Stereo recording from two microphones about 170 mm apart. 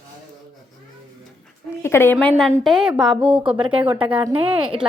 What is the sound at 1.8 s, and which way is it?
A woman's voice, 15° left (ahead or behind).